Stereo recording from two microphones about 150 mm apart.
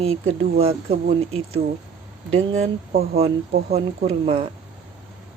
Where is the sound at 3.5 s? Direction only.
90° right.